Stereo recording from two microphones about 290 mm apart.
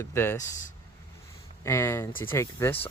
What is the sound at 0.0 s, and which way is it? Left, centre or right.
Speech, centre.